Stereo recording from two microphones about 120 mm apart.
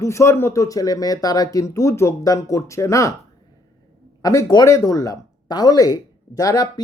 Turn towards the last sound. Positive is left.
turn(degrees=35)  # may be behind; listen again after turning